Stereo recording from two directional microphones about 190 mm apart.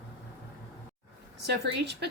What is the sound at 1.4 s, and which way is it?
Speech, 60° right (ahead or behind).